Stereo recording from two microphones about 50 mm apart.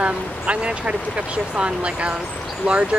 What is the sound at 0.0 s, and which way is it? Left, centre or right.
Speech, right.